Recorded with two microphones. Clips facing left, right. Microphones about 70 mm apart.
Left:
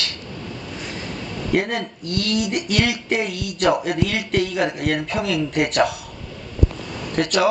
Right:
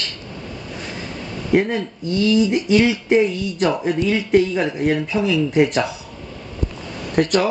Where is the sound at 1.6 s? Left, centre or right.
Left.